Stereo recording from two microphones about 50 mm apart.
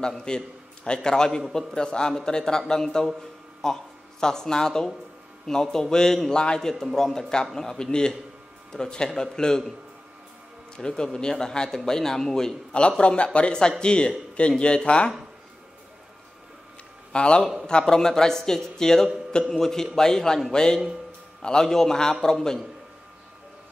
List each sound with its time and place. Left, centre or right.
0.0 s a man's voice: centre
6.7 s a man's voice: centre
10.8 s a man's voice: centre
17.1 s a man's voice: left